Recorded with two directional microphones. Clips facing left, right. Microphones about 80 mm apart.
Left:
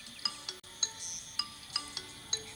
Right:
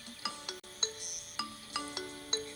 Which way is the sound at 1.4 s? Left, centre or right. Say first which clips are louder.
Right 5 dB; right.